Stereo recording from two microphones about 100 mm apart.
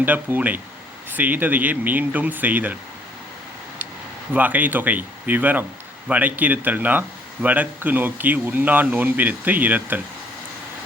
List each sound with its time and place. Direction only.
0.0 s speech: 15° right (ahead or behind)
4.4 s speech: 15° right (ahead or behind)